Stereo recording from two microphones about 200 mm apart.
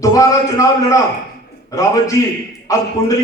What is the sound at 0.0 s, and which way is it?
Speech, 15° left (ahead or behind).